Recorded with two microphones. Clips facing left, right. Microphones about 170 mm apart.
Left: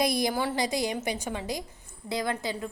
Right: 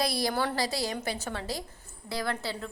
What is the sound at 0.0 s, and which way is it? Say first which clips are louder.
A woman's voice: left 2 dB; 20° left (ahead or behind).